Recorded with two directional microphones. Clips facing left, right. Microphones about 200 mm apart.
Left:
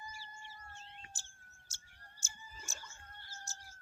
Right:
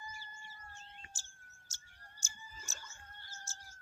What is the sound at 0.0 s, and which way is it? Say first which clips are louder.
Bird: left 1 dB; 35° left (ahead or behind).